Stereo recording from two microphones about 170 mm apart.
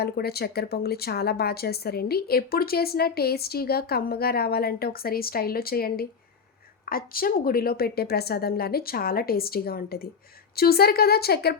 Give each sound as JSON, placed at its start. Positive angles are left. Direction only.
{"t": 0.0, "sound": "speech", "side_deg": 70}